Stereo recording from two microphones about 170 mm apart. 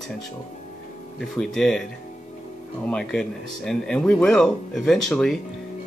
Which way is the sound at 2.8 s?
5° left (ahead or behind).